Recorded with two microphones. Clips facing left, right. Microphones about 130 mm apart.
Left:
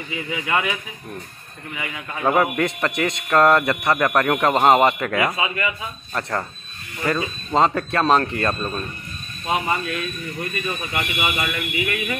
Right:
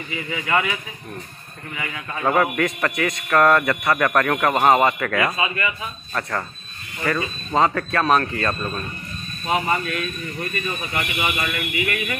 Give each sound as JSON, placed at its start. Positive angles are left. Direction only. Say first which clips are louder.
{"t": 0.1, "sound": "speech", "louder": "right 1 dB", "side_deg": 20}
{"t": 1.8, "sound": "speech", "louder": "even", "side_deg": 15}
{"t": 7.0, "sound": "speech", "louder": "left 1 dB", "side_deg": 20}